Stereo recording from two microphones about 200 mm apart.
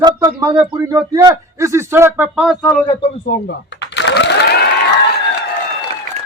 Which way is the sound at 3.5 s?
60° left (ahead or behind).